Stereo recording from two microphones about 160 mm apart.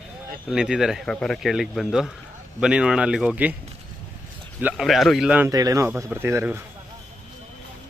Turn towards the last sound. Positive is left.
turn(degrees=-15)  # may be behind; listen again after turning